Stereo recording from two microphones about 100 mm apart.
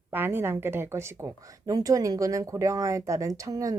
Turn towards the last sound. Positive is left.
turn(degrees=-35)  # may be behind; listen again after turning